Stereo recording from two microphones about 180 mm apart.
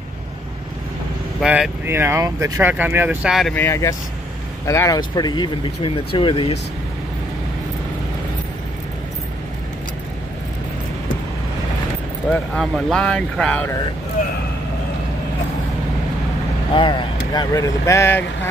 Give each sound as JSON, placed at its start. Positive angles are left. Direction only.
{"t": 1.4, "sound": "speech", "side_deg": -5}
{"t": 3.5, "sound": "speech", "side_deg": 15}
{"t": 12.3, "sound": "speech", "side_deg": 5}
{"t": 16.7, "sound": "speech", "side_deg": 25}